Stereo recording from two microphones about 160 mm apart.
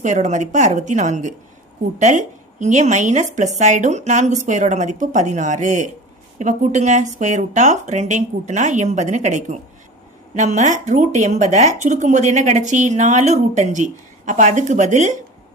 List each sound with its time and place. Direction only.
0.0 s speech: 50° right (ahead or behind)